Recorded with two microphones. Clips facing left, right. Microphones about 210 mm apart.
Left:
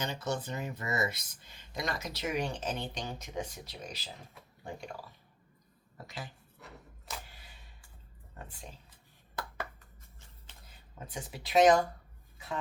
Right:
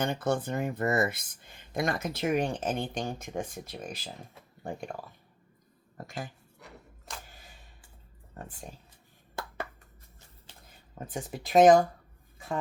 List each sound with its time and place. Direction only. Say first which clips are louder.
0.0 s speech: right 6 dB; 55° right (ahead or behind)
7.3 s a sound: right 3 dB; 45° right (ahead or behind)
10.9 s speech: right 6 dB; 50° right (ahead or behind)